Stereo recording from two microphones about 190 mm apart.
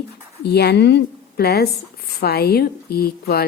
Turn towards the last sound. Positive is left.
turn(degrees=55)  # may be behind; listen again after turning